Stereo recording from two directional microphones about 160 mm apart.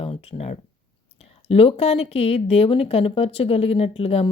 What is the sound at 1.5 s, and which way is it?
Speech, 40° left (ahead or behind).